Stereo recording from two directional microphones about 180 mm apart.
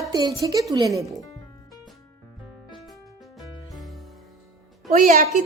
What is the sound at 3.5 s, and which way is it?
Music, 25° left (ahead or behind).